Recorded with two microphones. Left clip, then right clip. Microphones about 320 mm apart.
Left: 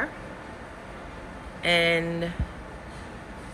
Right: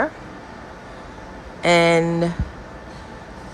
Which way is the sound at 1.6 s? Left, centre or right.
Right.